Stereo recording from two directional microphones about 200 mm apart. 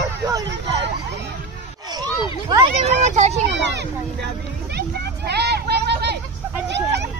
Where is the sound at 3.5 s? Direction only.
60° right (ahead or behind).